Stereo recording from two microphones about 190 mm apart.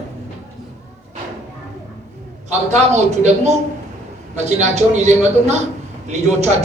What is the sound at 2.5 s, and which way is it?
A man's voice, 35° right (ahead or behind).